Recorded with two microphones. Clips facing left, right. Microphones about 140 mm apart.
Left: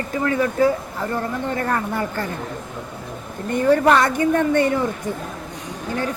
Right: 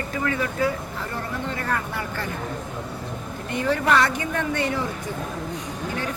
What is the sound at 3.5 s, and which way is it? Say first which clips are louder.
A woman's voice: left 6 dB; 45° left (ahead or behind).